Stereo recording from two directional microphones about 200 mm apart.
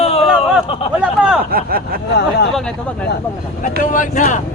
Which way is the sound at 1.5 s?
45° right (ahead or behind).